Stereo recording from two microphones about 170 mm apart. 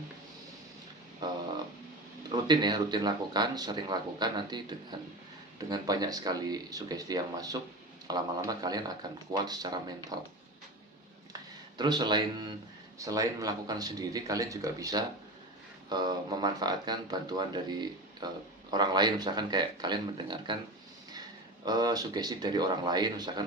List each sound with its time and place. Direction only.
1.2 s a sound: 25° right (ahead or behind)
2.3 s speech: 25° right (ahead or behind)
11.8 s speech: 25° right (ahead or behind)